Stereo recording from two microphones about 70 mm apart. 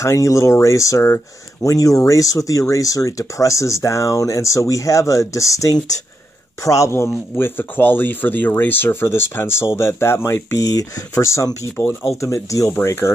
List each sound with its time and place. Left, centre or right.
0.0 s speech: left
7.3 s speech: left
10.6 s speech: left